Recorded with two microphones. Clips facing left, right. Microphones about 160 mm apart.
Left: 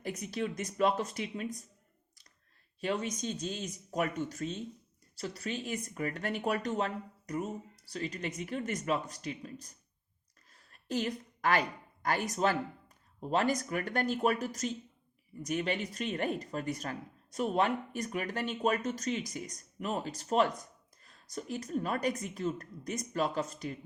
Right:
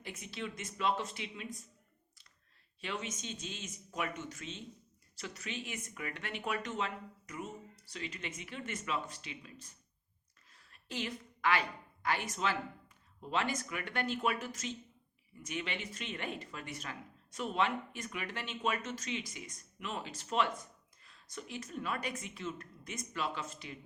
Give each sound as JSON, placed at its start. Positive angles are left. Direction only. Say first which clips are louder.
{"t": 0.0, "sound": "speech", "louder": "left 7 dB", "side_deg": 45}
{"t": 2.8, "sound": "speech", "louder": "left 8 dB", "side_deg": 40}
{"t": 10.5, "sound": "a sound", "louder": "left 9 dB", "side_deg": 40}
{"t": 12.0, "sound": "speech", "louder": "left 5 dB", "side_deg": 40}